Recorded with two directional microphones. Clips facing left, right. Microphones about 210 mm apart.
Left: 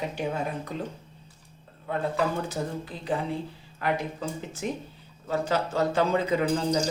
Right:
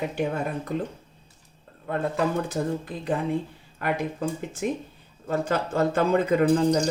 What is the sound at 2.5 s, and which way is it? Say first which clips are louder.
A man's voice: right 4 dB; 50° right (ahead or behind).